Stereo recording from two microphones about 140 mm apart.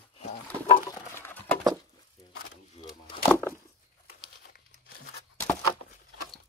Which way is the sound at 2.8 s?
50° left (ahead or behind).